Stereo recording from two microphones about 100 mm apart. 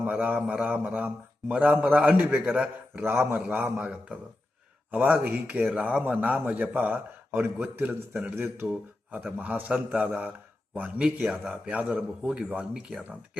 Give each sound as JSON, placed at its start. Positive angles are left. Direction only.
{"t": 0.0, "sound": "a man's voice", "side_deg": -15}